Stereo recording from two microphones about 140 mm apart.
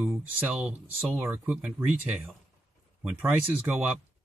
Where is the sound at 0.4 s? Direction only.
10° right (ahead or behind).